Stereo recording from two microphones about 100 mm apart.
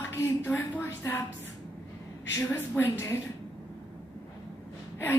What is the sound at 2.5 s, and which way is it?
Speech, 25° left (ahead or behind).